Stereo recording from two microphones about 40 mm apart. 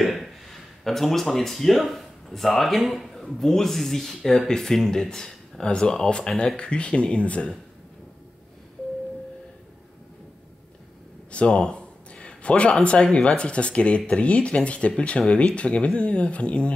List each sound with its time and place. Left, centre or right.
0.0 s speech: centre; by 7.5 s left
11.3 s a sound: left
13.1 s speech: left